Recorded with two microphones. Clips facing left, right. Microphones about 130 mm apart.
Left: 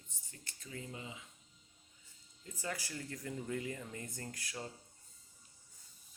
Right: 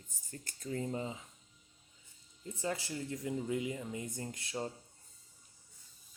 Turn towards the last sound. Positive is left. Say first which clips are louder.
# right 6 dB
turn(degrees=-25)  # may be behind; listen again after turning